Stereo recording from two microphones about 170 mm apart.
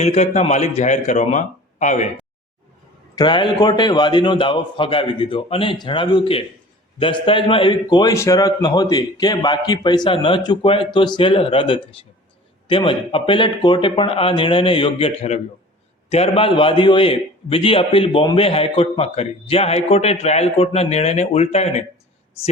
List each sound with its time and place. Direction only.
0.0 s a man's voice: 40° left (ahead or behind)
3.2 s a man's voice: 25° left (ahead or behind)